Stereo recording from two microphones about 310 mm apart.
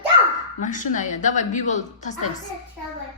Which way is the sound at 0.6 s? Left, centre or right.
Left.